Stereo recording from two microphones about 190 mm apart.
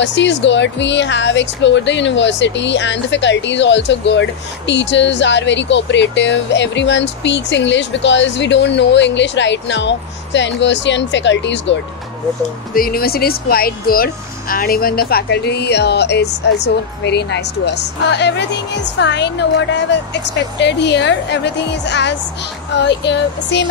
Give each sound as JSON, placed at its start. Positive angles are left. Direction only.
{"t": 0.0, "sound": "a woman's voice", "side_deg": 70}
{"t": 12.7, "sound": "speech", "side_deg": 50}